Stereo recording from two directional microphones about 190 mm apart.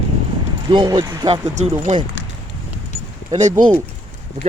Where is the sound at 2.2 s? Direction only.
75° left (ahead or behind).